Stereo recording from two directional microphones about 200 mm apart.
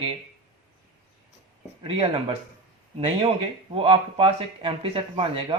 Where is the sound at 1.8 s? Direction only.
25° right (ahead or behind).